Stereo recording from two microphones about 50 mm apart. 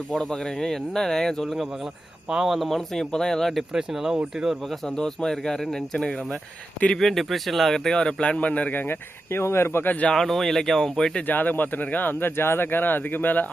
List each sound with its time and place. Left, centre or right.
0.1 s speech: centre
2.3 s speech: centre
3.6 s speech: centre
4.9 s speech: centre
7.9 s speech: centre
8.7 s speech: left
9.8 s speech: left
10.1 s speech: centre
11.3 s speech: left